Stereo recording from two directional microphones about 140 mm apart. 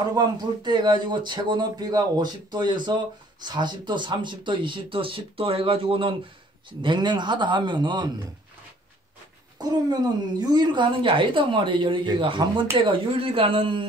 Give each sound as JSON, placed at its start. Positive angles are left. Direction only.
{"t": 0.1, "sound": "speech", "side_deg": -30}
{"t": 9.6, "sound": "speech", "side_deg": -30}